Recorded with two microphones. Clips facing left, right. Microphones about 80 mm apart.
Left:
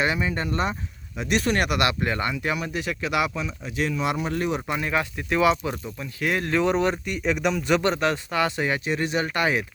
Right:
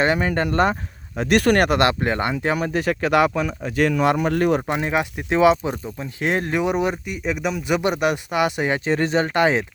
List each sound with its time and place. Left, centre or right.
0.0 s speech: right
1.7 s speech: right
4.6 s speech: right